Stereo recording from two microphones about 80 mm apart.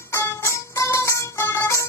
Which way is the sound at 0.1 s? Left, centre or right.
Left.